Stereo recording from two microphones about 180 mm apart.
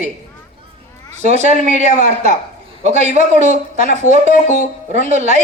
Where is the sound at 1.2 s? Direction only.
40° right (ahead or behind).